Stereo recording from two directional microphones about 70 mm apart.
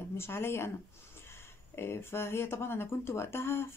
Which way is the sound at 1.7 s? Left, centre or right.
Left.